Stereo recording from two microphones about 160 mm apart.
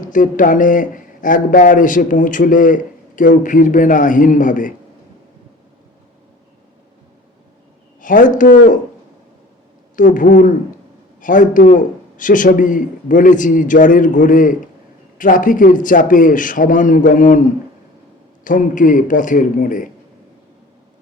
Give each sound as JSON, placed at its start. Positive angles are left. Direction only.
{"t": 0.0, "sound": "speech", "side_deg": 55}
{"t": 8.0, "sound": "speech", "side_deg": 55}
{"t": 9.9, "sound": "speech", "side_deg": 55}
{"t": 18.4, "sound": "speech", "side_deg": 55}